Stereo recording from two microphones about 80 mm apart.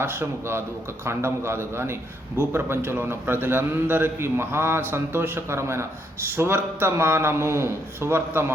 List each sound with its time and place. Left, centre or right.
0.0 s a man's voice: right